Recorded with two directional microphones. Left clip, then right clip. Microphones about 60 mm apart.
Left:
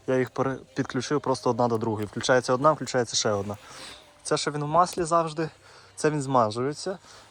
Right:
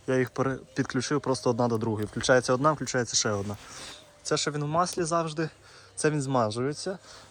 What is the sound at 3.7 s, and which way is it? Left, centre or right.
Speech, right.